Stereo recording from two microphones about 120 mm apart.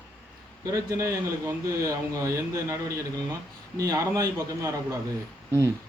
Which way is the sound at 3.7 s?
30° right (ahead or behind).